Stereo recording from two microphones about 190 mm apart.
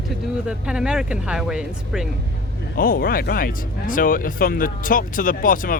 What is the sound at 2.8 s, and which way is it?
Speech, 50° left (ahead or behind).